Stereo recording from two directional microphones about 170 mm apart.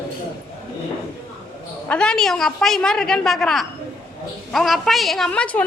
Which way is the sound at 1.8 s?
5° left (ahead or behind).